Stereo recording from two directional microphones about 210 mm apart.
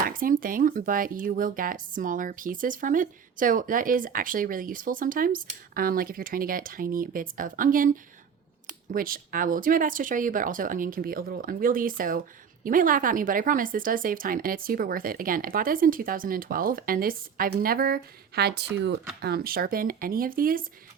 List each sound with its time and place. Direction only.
0.0 s speech: 40° right (ahead or behind)